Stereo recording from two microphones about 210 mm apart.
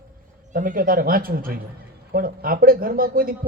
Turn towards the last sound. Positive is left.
turn(degrees=-45)  # may be behind; listen again after turning